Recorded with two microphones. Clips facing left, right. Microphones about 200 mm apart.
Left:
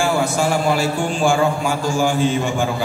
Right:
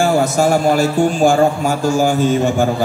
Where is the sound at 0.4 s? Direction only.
40° right (ahead or behind).